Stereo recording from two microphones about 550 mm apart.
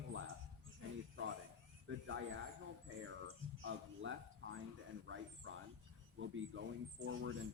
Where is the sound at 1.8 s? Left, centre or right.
Right.